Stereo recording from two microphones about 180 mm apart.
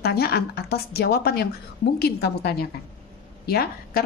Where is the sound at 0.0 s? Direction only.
60° left (ahead or behind).